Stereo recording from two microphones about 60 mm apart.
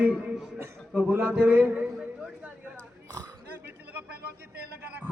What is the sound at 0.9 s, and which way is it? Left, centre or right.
Speech, right.